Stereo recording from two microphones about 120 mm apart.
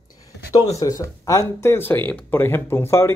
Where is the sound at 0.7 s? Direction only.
30° left (ahead or behind).